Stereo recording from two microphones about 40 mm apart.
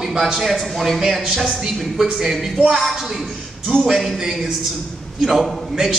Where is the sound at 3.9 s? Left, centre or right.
Centre.